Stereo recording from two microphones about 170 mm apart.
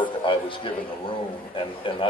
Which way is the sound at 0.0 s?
30° left (ahead or behind).